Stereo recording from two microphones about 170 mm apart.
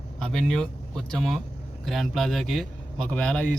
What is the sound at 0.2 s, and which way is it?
A man's voice, 5° left (ahead or behind).